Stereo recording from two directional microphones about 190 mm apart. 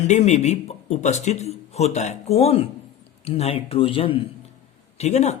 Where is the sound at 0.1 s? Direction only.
35° left (ahead or behind).